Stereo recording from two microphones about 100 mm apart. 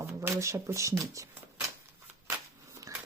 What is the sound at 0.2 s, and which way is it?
Speech, 30° right (ahead or behind).